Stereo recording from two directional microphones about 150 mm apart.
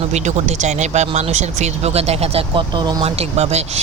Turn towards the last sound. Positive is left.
turn(degrees=-45)  # may be behind; listen again after turning